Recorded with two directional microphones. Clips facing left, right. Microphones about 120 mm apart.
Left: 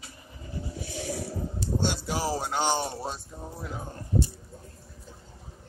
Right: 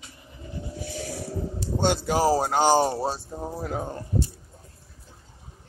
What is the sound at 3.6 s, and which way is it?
Speech, 65° right (ahead or behind).